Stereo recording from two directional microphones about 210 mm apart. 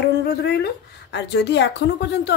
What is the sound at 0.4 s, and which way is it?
A woman's voice, 55° left (ahead or behind).